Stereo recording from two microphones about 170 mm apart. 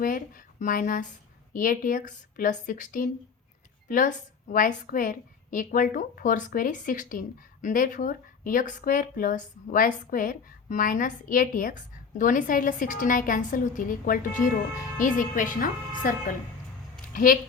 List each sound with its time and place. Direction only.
0.0 s a woman's voice: 50° left (ahead or behind)